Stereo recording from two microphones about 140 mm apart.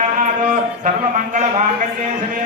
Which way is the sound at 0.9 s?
60° right (ahead or behind).